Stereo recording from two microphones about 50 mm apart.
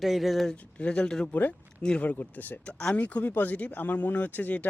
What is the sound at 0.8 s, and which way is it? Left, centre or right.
Speech, left.